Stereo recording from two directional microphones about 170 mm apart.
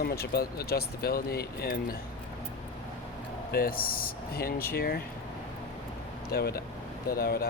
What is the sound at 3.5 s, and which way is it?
Speech, 60° left (ahead or behind).